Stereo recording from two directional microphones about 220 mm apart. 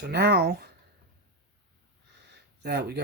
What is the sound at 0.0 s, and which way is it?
Speech, 50° right (ahead or behind).